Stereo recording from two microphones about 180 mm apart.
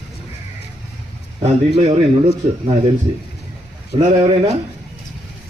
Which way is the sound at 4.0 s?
30° right (ahead or behind).